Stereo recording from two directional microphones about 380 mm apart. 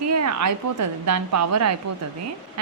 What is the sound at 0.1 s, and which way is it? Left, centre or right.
A woman's voice, right.